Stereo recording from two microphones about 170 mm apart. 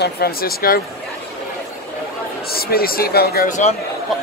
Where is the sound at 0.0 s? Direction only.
65° left (ahead or behind).